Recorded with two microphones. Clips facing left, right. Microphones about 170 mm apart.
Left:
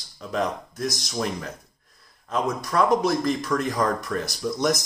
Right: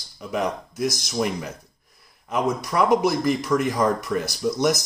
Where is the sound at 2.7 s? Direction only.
15° right (ahead or behind).